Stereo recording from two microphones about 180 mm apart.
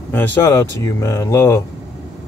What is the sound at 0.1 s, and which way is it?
Speech, 10° left (ahead or behind).